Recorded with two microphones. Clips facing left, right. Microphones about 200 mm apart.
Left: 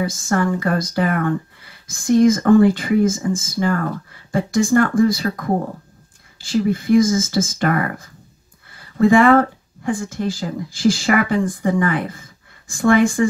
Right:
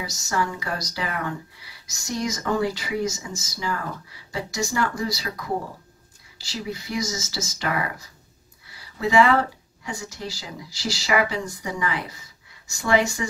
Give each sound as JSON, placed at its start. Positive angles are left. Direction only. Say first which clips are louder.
{"t": 0.0, "sound": "speech", "louder": "left 8 dB", "side_deg": 50}